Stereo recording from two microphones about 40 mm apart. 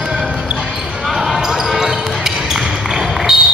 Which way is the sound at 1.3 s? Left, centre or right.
Centre.